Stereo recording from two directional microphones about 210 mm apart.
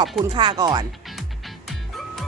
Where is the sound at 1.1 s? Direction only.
Centre (ahead or behind).